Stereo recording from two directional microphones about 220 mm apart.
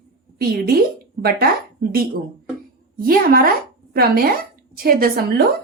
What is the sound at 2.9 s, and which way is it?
A woman's voice, 40° right (ahead or behind).